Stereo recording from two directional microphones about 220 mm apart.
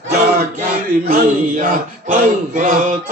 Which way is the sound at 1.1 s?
40° right (ahead or behind).